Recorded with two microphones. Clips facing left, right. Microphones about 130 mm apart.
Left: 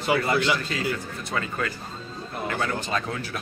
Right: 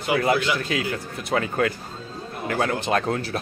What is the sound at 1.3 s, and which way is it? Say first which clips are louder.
Speech: right 7 dB; 70° right (ahead or behind).